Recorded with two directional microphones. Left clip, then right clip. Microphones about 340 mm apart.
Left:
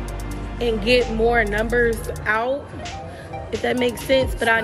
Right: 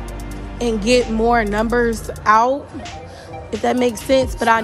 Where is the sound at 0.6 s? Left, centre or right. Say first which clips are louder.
Right 2 dB; centre.